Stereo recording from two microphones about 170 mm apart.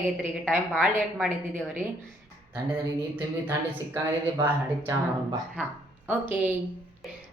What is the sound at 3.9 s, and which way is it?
Speech, 15° right (ahead or behind).